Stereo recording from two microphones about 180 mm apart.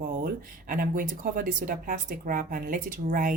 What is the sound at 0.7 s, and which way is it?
Speech, 50° right (ahead or behind).